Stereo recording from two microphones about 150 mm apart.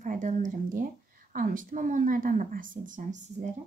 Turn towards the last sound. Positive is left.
turn(degrees=-55)  # may be behind; listen again after turning